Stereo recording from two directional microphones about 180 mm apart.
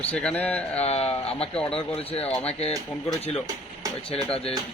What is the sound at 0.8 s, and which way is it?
Speech, 35° left (ahead or behind).